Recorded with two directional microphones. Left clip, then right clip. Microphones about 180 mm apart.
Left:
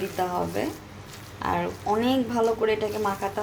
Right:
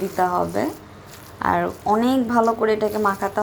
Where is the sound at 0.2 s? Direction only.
25° right (ahead or behind).